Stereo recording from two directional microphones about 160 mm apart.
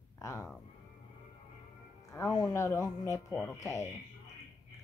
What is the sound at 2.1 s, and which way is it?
Speech, 20° left (ahead or behind).